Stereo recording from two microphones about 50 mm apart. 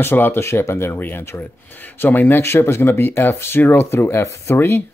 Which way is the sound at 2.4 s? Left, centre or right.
Left.